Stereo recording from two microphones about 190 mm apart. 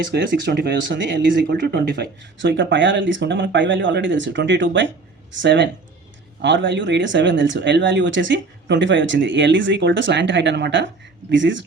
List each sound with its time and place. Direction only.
0.1 s speech: 60° right (ahead or behind)